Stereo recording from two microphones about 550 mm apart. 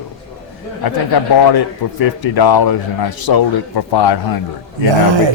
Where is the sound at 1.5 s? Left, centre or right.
Left.